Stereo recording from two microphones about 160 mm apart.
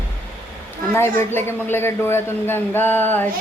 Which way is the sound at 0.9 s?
15° left (ahead or behind).